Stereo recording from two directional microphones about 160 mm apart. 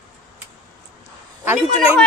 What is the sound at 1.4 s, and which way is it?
Speech, 15° right (ahead or behind).